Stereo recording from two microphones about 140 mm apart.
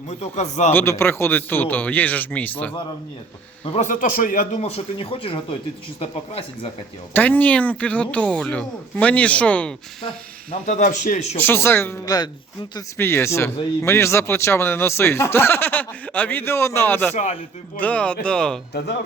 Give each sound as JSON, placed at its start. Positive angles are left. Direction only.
{"t": 0.1, "sound": "speech", "side_deg": 55}
{"t": 0.7, "sound": "speech", "side_deg": 15}
{"t": 3.6, "sound": "a man's voice", "side_deg": 45}
{"t": 3.8, "sound": "speech", "side_deg": 75}
{"t": 4.6, "sound": "speech", "side_deg": 40}
{"t": 7.1, "sound": "speech", "side_deg": 10}
{"t": 10.5, "sound": "speech", "side_deg": 55}
{"t": 11.3, "sound": "speech", "side_deg": 15}
{"t": 12.0, "sound": "speech", "side_deg": 30}
{"t": 13.0, "sound": "speech", "side_deg": 20}